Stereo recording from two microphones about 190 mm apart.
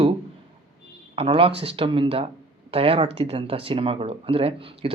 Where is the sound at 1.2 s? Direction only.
30° right (ahead or behind).